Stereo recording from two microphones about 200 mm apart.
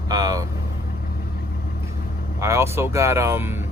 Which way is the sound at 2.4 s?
15° right (ahead or behind).